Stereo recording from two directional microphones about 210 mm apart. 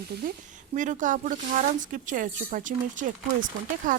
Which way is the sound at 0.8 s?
35° right (ahead or behind).